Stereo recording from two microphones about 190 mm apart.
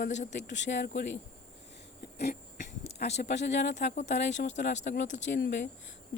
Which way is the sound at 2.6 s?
35° left (ahead or behind).